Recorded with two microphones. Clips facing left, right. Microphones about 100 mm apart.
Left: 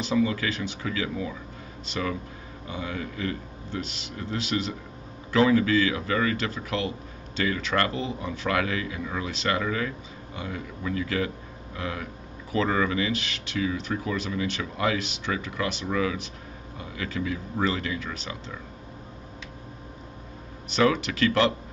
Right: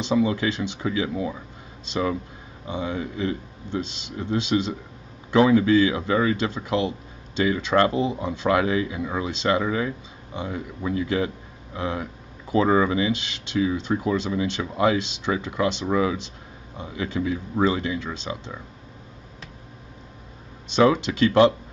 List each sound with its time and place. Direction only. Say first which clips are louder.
0.0 s speech: right 3 dB; 20° right (ahead or behind)
20.7 s speech: right 4 dB; 20° right (ahead or behind)